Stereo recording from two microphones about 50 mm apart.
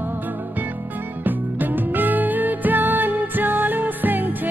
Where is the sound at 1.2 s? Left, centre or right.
Right.